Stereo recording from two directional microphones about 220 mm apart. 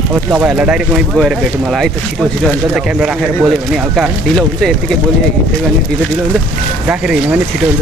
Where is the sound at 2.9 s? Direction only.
5° right (ahead or behind).